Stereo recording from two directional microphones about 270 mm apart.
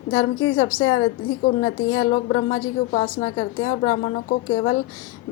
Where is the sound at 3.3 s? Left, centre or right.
Left.